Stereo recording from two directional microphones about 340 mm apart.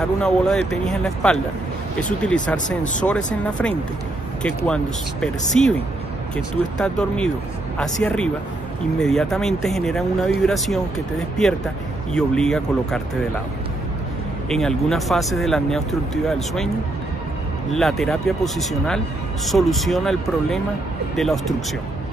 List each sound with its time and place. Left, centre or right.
0.2 s speech: centre
14.5 s speech: centre